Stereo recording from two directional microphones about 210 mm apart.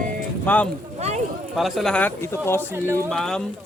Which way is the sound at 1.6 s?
Centre (ahead or behind).